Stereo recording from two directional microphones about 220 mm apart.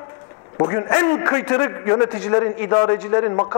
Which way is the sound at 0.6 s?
20° left (ahead or behind).